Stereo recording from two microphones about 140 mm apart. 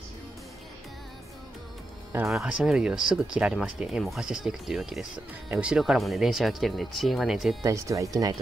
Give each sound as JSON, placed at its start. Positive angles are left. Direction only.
{"t": 2.2, "sound": "speech", "side_deg": -5}
{"t": 7.6, "sound": "speech", "side_deg": -20}